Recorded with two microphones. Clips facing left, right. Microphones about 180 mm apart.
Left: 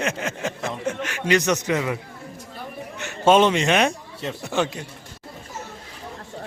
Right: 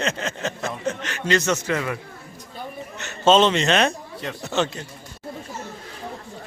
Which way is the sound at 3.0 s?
10° left (ahead or behind).